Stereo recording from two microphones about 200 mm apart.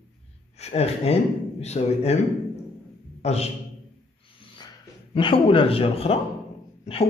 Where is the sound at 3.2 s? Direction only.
30° left (ahead or behind).